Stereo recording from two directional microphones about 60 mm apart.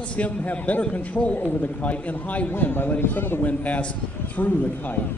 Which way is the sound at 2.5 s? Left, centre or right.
Left.